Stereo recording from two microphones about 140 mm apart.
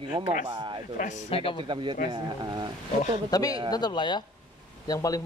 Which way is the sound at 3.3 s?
25° left (ahead or behind).